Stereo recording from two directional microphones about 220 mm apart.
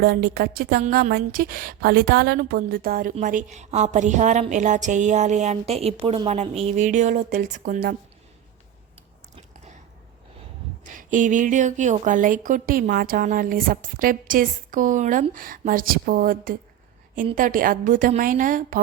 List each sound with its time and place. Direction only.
0.0 s a woman's voice: 45° right (ahead or behind)
10.8 s a woman's voice: 35° right (ahead or behind)